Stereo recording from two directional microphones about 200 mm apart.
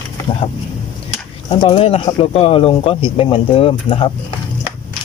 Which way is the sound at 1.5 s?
25° left (ahead or behind).